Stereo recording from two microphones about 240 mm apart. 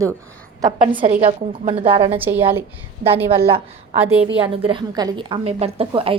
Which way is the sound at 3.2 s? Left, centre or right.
Right.